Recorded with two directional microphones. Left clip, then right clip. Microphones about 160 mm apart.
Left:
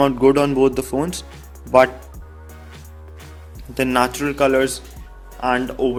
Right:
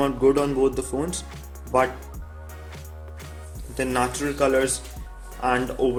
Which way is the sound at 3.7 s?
40° left (ahead or behind).